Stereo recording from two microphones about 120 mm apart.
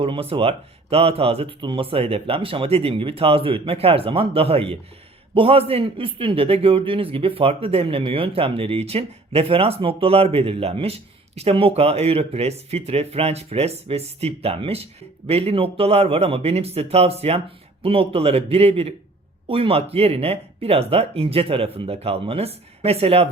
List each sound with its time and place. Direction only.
0.0 s a man's voice: 50° right (ahead or behind)